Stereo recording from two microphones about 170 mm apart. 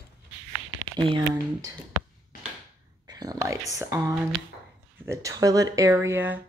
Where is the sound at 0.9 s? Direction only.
25° right (ahead or behind).